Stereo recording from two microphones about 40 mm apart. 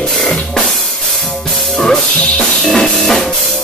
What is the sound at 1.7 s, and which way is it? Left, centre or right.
Music, centre.